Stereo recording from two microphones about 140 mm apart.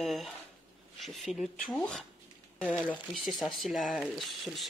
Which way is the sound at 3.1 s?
Centre (ahead or behind).